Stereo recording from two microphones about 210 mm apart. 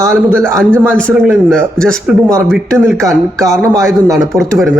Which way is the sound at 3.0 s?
15° right (ahead or behind).